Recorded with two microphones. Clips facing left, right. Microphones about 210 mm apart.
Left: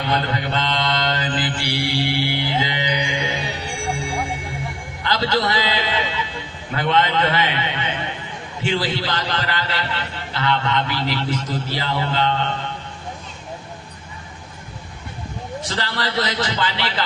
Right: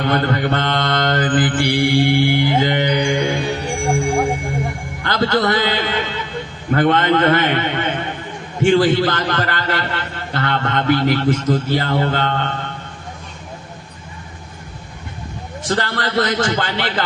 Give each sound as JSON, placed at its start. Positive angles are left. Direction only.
{"t": 0.0, "sound": "mantra", "side_deg": -55}
{"t": 8.6, "sound": "a man's voice", "side_deg": -50}
{"t": 15.6, "sound": "a man's voice", "side_deg": -50}